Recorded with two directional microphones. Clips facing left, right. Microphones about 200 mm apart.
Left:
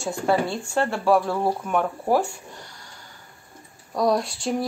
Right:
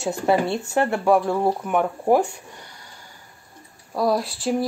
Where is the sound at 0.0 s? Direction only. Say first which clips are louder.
Right 2 dB; 20° right (ahead or behind).